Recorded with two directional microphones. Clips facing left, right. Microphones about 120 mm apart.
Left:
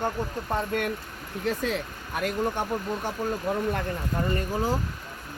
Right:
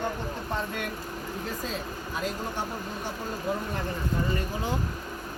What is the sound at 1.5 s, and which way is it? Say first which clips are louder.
Speech: left 10 dB; 75° left (ahead or behind).